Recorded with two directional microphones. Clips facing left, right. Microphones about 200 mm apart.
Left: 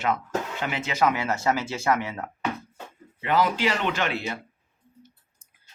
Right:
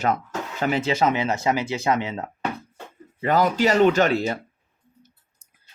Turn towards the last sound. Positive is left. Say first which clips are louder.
# right 8 dB
turn(degrees=-40)  # may be behind; listen again after turning